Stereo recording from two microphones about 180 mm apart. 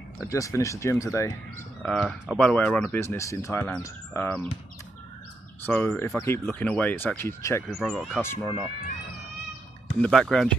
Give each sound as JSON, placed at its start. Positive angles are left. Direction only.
{"t": 0.3, "sound": "speech", "side_deg": 15}
{"t": 1.8, "sound": "speech", "side_deg": 0}
{"t": 5.7, "sound": "speech", "side_deg": 10}
{"t": 7.6, "sound": "speech", "side_deg": 0}
{"t": 8.2, "sound": "speech", "side_deg": 15}
{"t": 10.0, "sound": "speech", "side_deg": 0}